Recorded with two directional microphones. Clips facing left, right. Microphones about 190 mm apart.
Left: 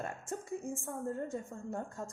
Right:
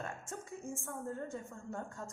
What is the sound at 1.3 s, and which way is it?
Speech, 30° left (ahead or behind).